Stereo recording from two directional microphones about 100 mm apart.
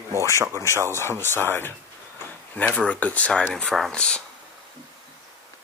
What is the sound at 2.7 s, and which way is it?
Speech, 15° left (ahead or behind).